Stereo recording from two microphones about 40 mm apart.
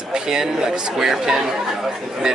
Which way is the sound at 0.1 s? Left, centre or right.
Centre.